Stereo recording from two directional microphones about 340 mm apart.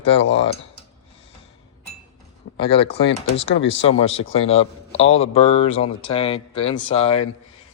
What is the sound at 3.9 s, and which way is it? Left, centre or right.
Speech, left.